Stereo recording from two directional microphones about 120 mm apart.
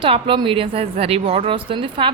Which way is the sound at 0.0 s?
45° right (ahead or behind).